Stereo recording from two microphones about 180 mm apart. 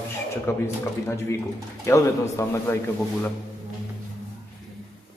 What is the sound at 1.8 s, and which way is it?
A man's voice, 15° left (ahead or behind).